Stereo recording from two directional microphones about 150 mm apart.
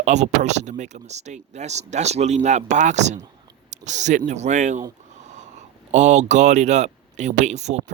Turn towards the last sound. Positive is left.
turn(degrees=-50)  # may be behind; listen again after turning